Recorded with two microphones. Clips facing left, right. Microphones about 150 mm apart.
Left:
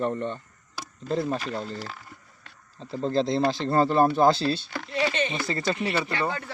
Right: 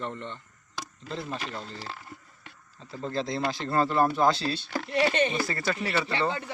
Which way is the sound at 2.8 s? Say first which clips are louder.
Left 7 dB; 30° left (ahead or behind).